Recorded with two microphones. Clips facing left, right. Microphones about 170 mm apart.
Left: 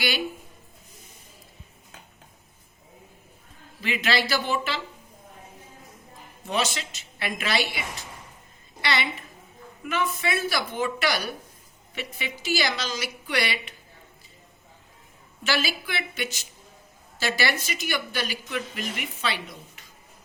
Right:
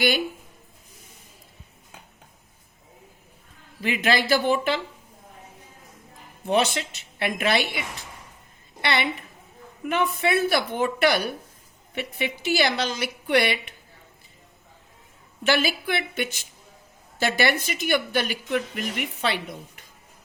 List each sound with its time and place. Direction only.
3.8 s speech: 50° right (ahead or behind)
6.4 s a woman's voice: 55° right (ahead or behind)
15.4 s speech: 55° right (ahead or behind)